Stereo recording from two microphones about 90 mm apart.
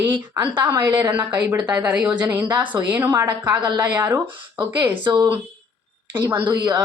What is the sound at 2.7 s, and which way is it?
Speech, 45° right (ahead or behind).